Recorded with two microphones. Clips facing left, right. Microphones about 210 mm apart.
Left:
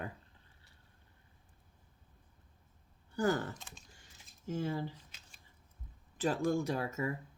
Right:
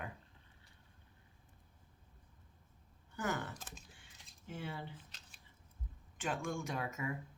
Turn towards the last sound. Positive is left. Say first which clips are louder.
# left 5 dB
turn(degrees=35)  # may be behind; listen again after turning